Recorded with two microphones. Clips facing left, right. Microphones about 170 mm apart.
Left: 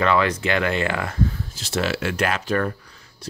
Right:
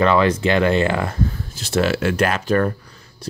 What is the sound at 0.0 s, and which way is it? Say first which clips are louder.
Speech: right 4 dB; 30° right (ahead or behind).